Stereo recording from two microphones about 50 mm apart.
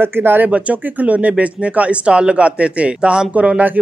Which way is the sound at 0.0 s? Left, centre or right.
Right.